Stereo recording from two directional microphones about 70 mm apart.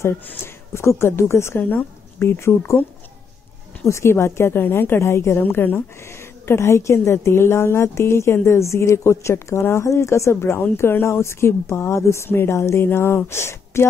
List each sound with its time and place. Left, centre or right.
0.0 s a woman's voice: left
1.6 s a woman's voice: left
2.2 s a woman's voice: left
3.9 s a woman's voice: left
5.4 s a woman's voice: left